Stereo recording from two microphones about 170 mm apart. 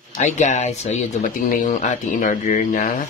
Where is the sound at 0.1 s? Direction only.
45° left (ahead or behind).